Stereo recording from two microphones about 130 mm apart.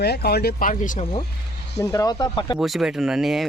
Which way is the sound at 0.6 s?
90° left.